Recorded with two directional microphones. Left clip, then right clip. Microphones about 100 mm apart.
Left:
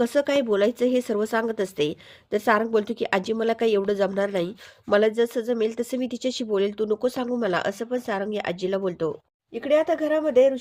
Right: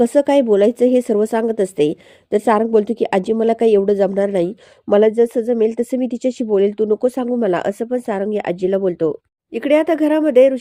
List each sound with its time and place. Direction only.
0.0 s a woman's voice: 35° right (ahead or behind)
7.5 s a woman's voice: 45° right (ahead or behind)
9.6 s speech: 60° right (ahead or behind)